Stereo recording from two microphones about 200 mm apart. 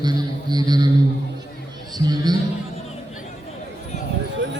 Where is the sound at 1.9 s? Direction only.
20° right (ahead or behind).